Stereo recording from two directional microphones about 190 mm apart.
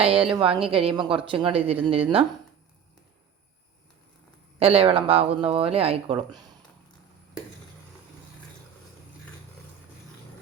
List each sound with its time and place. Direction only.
0.0 s speech: 30° right (ahead or behind)
4.6 s speech: 30° right (ahead or behind)